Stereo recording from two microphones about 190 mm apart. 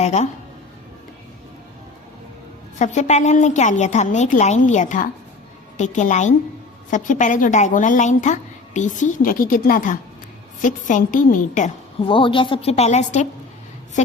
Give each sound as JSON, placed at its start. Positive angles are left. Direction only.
{"t": 0.0, "sound": "speech", "side_deg": 35}
{"t": 2.7, "sound": "a woman's voice", "side_deg": 40}
{"t": 12.0, "sound": "a woman's voice", "side_deg": 25}